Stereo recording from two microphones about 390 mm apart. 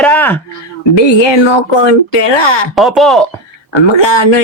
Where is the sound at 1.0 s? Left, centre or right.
Left.